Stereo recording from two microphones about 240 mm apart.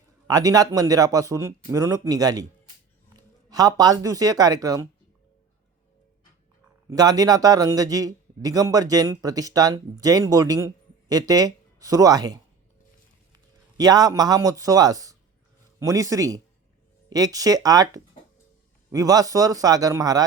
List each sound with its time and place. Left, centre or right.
0.3 s a man's voice: centre
3.5 s a man's voice: centre
6.9 s a man's voice: centre
13.7 s a man's voice: centre